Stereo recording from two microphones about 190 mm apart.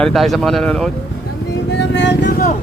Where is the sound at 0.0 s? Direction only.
Centre (ahead or behind).